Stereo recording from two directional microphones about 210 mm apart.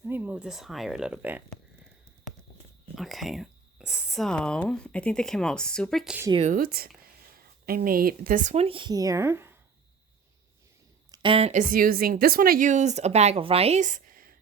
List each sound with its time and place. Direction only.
0.0 s speech: 10° right (ahead or behind)
2.9 s speech: centre (ahead or behind)
6.3 s a woman's voice: 30° right (ahead or behind)
6.6 s speech: 45° right (ahead or behind); by 9.6 s 10° right (ahead or behind)
11.1 s a woman's voice: 25° right (ahead or behind); by 14.3 s 40° right (ahead or behind)